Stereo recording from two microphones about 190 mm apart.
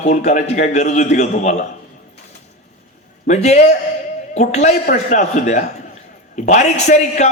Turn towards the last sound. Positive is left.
turn(degrees=35)  # may be behind; listen again after turning